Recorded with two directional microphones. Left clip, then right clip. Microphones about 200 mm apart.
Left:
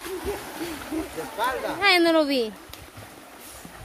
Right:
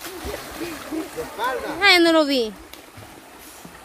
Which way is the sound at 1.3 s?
50° left (ahead or behind).